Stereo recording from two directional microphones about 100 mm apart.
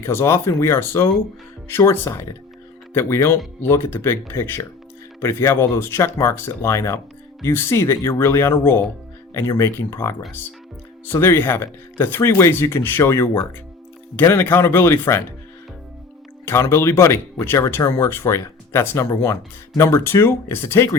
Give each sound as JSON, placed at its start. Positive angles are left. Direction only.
{"t": 0.0, "sound": "speech", "side_deg": 25}
{"t": 16.5, "sound": "speech", "side_deg": 25}